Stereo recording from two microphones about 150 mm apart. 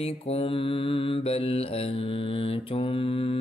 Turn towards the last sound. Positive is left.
turn(degrees=40)  # may be behind; listen again after turning